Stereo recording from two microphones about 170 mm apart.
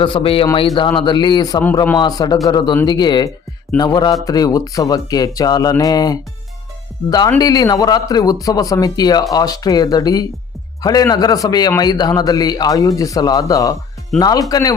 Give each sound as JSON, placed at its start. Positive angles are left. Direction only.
{"t": 0.0, "sound": "a man's voice", "side_deg": 30}
{"t": 7.3, "sound": "speech", "side_deg": 20}